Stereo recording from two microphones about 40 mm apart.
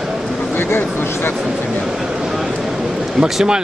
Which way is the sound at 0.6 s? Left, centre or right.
Left.